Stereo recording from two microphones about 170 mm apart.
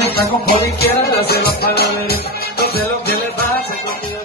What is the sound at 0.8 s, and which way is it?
Music, 65° left (ahead or behind).